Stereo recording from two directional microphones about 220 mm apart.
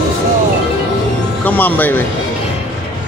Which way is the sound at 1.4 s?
10° left (ahead or behind).